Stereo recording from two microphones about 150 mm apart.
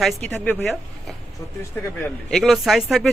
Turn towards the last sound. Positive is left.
turn(degrees=0)  # may be behind; listen again after turning